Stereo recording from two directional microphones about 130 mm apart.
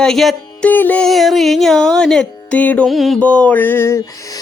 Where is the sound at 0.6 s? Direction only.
15° left (ahead or behind).